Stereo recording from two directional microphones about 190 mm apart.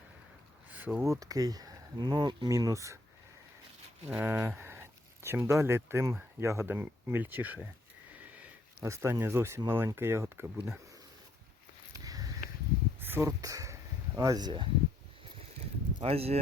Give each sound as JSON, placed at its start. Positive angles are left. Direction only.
{"t": 0.7, "sound": "speech", "side_deg": -10}
{"t": 4.0, "sound": "speech", "side_deg": -10}
{"t": 11.9, "sound": "a sound", "side_deg": -20}
{"t": 14.2, "sound": "speech", "side_deg": -20}
{"t": 16.0, "sound": "speech", "side_deg": -30}